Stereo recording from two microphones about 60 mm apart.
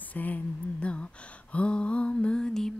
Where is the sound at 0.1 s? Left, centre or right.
Left.